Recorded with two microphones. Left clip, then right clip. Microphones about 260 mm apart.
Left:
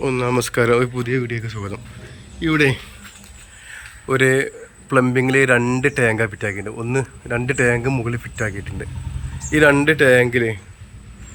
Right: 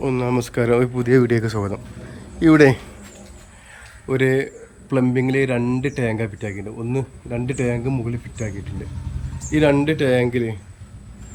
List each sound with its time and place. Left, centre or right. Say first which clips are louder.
0.0 s speech: left 2 dB; centre
3.7 s a man's voice: left 3 dB; centre
6.7 s speech: left 3 dB; left
6.9 s speech: left 5 dB; centre
7.9 s speech: left 4 dB; left
8.1 s speech: left 6 dB; centre